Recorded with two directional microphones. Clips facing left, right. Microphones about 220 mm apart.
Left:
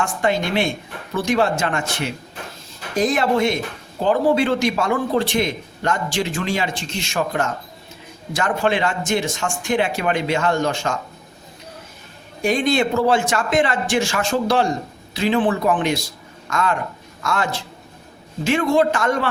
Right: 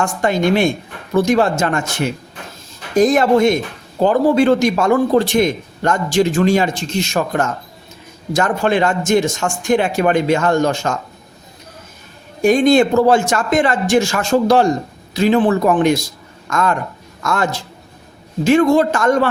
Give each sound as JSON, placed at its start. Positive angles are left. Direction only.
{"t": 0.0, "sound": "a man's voice", "side_deg": -45}
{"t": 12.4, "sound": "a man's voice", "side_deg": -45}